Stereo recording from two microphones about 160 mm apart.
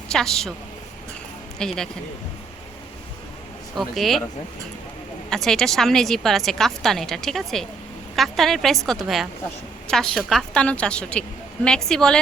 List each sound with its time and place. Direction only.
0.1 s a woman's voice: 5° left (ahead or behind)
1.5 s a woman's voice: 5° left (ahead or behind)
3.8 s a woman's voice: centre (ahead or behind)
5.3 s a woman's voice: 5° left (ahead or behind)